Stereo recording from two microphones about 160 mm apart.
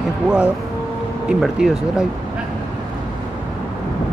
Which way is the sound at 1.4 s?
5° right (ahead or behind).